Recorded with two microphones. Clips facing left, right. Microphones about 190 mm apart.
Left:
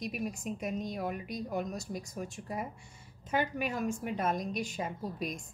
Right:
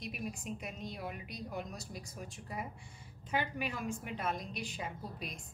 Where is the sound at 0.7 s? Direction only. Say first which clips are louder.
Left 8 dB; 45° left (ahead or behind).